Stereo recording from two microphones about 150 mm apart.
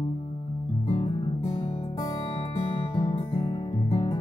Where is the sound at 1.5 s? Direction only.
35° left (ahead or behind).